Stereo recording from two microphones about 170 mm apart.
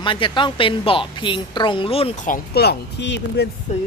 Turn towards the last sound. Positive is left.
turn(degrees=45)  # may be behind; listen again after turning